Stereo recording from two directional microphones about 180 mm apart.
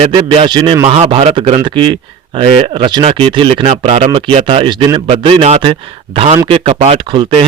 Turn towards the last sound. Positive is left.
turn(degrees=-30)  # may be behind; listen again after turning